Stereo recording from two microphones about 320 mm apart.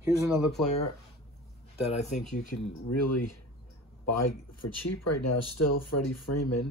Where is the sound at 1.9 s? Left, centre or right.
Left.